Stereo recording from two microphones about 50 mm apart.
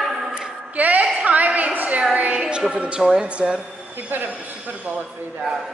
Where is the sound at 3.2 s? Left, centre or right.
Right.